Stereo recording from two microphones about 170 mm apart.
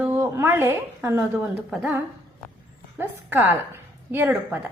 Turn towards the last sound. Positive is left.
turn(degrees=-10)  # may be behind; listen again after turning